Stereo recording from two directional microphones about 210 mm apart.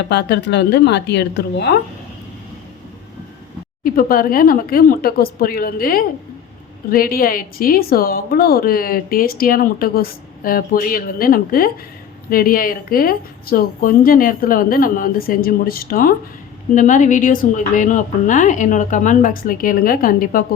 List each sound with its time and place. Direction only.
0.1 s a woman's voice: 55° left (ahead or behind)
3.8 s a woman's voice: 45° left (ahead or behind)